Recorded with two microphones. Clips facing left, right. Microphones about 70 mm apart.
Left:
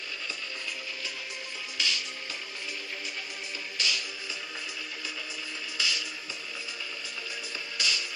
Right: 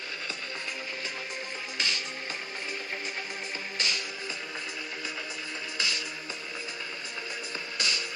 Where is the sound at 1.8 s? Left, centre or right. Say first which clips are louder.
Even; right.